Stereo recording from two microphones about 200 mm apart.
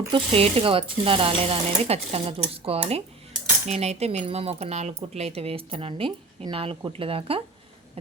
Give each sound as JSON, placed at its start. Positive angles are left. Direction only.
{"t": 0.1, "sound": "speech", "side_deg": -30}